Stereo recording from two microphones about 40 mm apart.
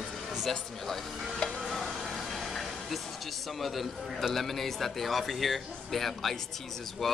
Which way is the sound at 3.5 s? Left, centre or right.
Centre.